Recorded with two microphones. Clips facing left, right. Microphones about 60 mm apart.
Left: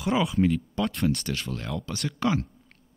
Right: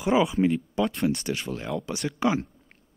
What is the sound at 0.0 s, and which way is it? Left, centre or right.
Speech, centre.